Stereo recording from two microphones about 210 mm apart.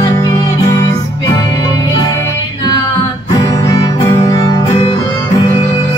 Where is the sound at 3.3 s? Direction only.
20° left (ahead or behind).